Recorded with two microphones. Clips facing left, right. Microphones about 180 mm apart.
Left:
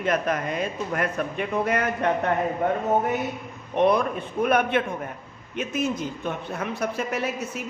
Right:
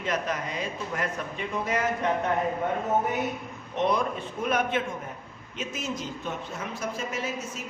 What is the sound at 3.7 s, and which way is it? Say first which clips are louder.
A man's voice: left 5 dB; 60° left (ahead or behind).